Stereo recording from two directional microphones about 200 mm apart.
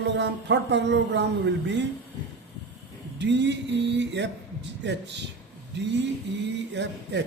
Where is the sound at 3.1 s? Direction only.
60° right (ahead or behind).